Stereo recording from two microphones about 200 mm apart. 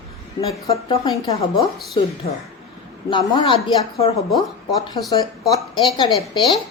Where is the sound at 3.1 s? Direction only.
25° left (ahead or behind).